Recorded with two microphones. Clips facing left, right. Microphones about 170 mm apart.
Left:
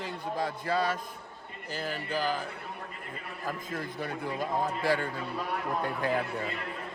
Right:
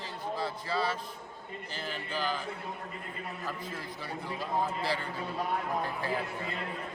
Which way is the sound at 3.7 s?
50° left (ahead or behind).